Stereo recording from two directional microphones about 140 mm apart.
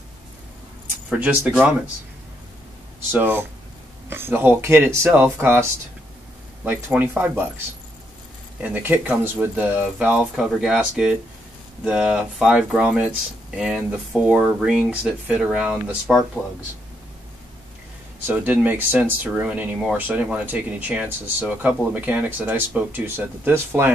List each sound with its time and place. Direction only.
1.1 s speech: 10° right (ahead or behind)
3.1 s speech: 15° right (ahead or behind)
18.2 s speech: 10° right (ahead or behind)